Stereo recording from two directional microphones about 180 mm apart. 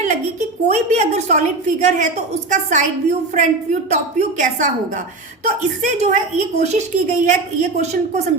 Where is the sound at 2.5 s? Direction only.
45° right (ahead or behind).